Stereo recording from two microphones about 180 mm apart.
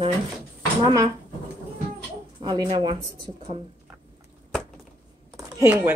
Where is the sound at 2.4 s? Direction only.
25° right (ahead or behind).